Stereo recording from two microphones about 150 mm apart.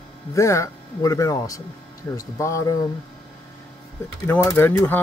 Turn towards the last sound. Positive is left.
turn(degrees=15)  # may be behind; listen again after turning